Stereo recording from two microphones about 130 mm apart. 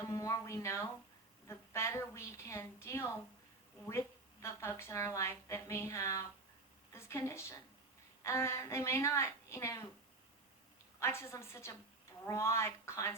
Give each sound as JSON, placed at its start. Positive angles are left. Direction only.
{"t": 0.0, "sound": "a woman's voice", "side_deg": 25}
{"t": 11.0, "sound": "a woman's voice", "side_deg": 20}